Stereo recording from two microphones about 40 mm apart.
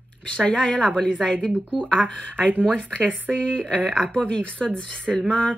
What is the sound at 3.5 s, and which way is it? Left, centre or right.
Speech, left.